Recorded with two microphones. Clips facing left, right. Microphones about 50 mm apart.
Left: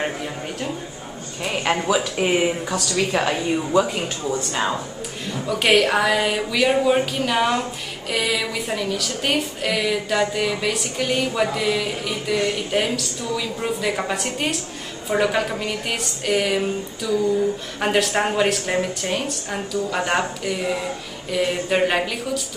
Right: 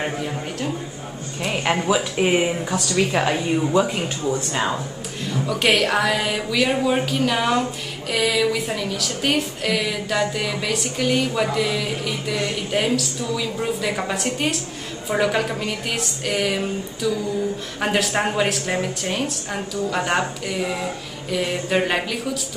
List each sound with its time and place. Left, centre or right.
0.0 s speech: centre
2.7 s speech: centre
3.1 s speech: centre